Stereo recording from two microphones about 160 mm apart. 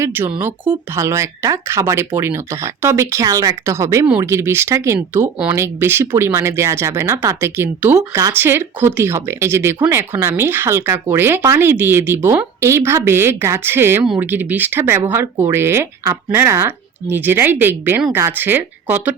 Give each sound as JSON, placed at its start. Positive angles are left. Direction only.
{"t": 0.0, "sound": "speech", "side_deg": -10}